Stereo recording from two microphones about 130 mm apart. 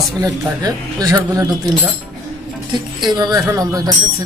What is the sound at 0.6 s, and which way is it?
Speech, 30° right (ahead or behind).